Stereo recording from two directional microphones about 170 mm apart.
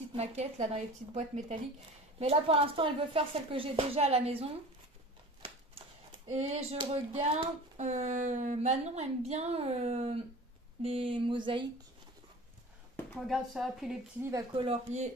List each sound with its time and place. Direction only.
0.1 s speech: 40° right (ahead or behind)
5.4 s typewriter: 30° right (ahead or behind)
7.7 s speech: 45° right (ahead or behind)
13.3 s a woman's voice: centre (ahead or behind)
14.5 s speech: 35° right (ahead or behind)